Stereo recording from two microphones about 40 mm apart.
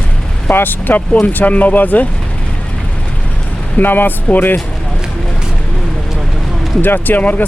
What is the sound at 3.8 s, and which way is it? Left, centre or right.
Speech, left.